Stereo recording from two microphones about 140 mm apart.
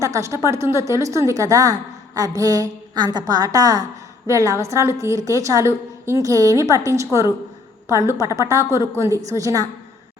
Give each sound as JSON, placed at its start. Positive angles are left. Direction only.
{"t": 0.0, "sound": "a woman's voice", "side_deg": -20}